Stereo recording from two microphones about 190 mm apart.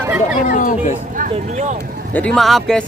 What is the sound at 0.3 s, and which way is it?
Speech, 40° left (ahead or behind).